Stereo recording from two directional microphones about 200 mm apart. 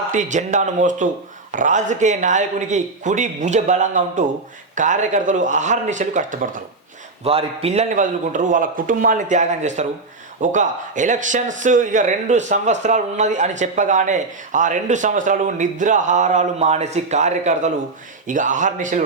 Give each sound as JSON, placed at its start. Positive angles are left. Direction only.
{"t": 0.1, "sound": "speech", "side_deg": -40}
{"t": 7.3, "sound": "speech", "side_deg": -30}